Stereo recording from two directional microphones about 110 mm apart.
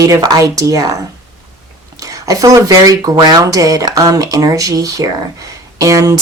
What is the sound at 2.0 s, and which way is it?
Speech, 30° right (ahead or behind).